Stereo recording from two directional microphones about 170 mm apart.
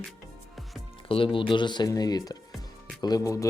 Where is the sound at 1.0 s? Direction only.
30° left (ahead or behind).